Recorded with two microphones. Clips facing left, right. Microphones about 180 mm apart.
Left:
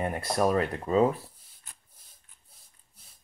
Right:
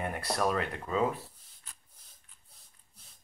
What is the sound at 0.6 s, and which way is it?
Speech, 35° left (ahead or behind).